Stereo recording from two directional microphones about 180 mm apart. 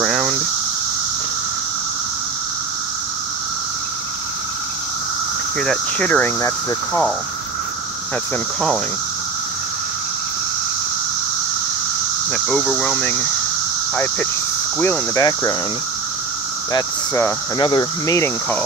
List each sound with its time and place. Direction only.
0.0 s a sound: centre (ahead or behind)
5.6 s speech: 5° left (ahead or behind)
12.3 s speech: 5° left (ahead or behind)
14.8 s speech: 10° left (ahead or behind)
16.7 s speech: 20° left (ahead or behind)